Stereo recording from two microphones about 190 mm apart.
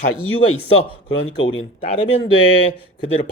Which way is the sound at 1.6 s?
30° left (ahead or behind).